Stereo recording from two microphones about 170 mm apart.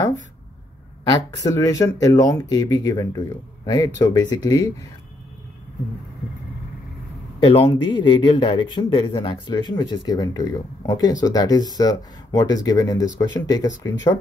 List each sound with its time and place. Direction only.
1.4 s speech: 20° left (ahead or behind)
7.5 s speech: 30° left (ahead or behind)